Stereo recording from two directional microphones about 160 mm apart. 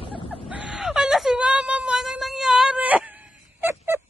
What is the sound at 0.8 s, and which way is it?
Whimper, 5° right (ahead or behind).